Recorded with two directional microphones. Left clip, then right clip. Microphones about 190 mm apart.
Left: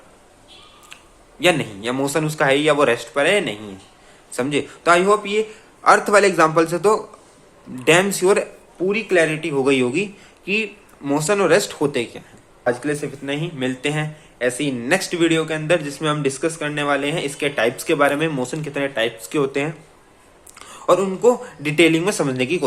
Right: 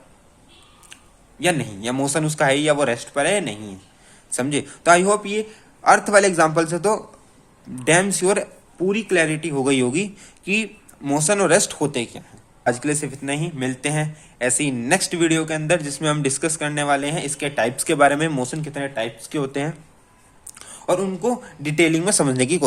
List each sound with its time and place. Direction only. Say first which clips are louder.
1.4 s a man's voice: left 4 dB; 20° right (ahead or behind)
8.9 s a man's voice: left 2 dB; 40° right (ahead or behind)